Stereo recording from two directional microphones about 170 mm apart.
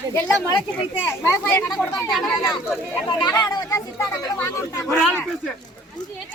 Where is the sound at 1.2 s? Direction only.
15° left (ahead or behind).